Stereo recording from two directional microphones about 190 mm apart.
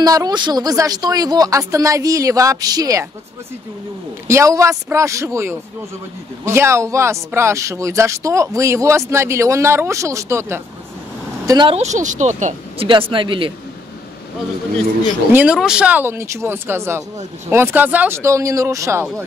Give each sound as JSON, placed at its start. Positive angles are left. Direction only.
{"t": 0.0, "sound": "speech", "side_deg": -20}
{"t": 4.3, "sound": "speech", "side_deg": -15}
{"t": 11.7, "sound": "speech", "side_deg": -40}
{"t": 12.8, "sound": "speech", "side_deg": -25}
{"t": 15.3, "sound": "speech", "side_deg": -5}